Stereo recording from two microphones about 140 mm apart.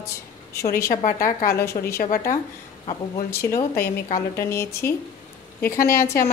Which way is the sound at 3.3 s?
20° left (ahead or behind).